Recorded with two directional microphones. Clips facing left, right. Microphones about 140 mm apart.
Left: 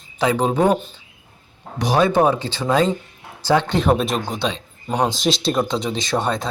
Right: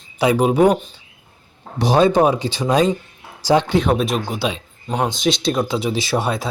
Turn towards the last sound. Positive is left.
turn(degrees=-10)  # may be behind; listen again after turning